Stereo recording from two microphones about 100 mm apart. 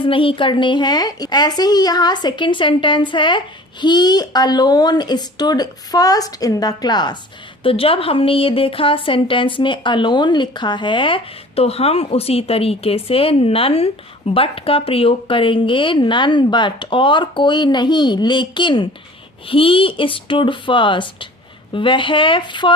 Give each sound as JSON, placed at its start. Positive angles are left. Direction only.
{"t": 0.0, "sound": "speech", "side_deg": 60}
{"t": 7.6, "sound": "speech", "side_deg": 70}
{"t": 19.5, "sound": "speech", "side_deg": 65}